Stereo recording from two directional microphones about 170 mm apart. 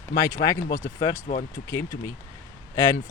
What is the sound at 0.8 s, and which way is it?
Speech, 45° left (ahead or behind).